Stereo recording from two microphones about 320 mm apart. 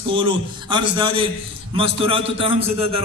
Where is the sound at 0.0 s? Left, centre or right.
Centre.